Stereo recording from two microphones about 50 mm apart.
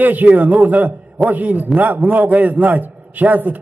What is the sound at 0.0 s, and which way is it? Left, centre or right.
A man's voice, right.